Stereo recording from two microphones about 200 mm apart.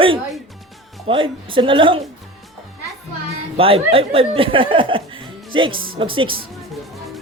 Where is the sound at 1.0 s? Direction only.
25° right (ahead or behind).